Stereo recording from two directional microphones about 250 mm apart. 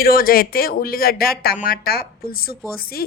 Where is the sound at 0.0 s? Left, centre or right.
Left.